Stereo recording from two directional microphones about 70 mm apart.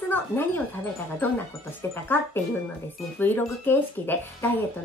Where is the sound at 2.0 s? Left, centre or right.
Left.